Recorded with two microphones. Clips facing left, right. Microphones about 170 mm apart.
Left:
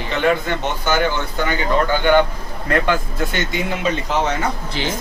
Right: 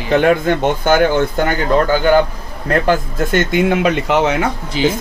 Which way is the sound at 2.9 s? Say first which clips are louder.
Right 5 dB; 55° right (ahead or behind).